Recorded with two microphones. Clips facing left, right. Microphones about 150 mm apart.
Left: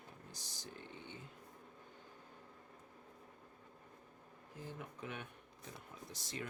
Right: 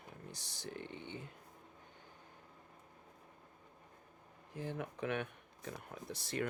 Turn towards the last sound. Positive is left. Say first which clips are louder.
# right 7 dB
turn(degrees=-65)  # may be behind; listen again after turning